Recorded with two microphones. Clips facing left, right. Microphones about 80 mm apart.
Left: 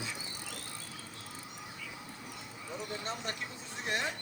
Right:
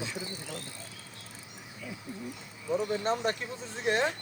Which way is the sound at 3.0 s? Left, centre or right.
Right.